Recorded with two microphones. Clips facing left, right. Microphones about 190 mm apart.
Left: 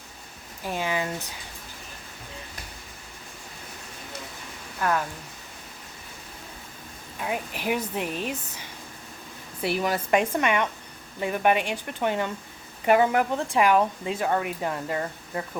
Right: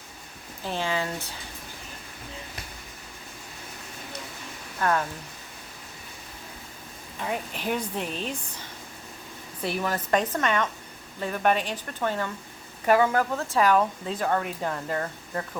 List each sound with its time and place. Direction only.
0.6 s speech: 15° left (ahead or behind)
7.2 s speech: 5° left (ahead or behind)
9.6 s speech: 10° left (ahead or behind)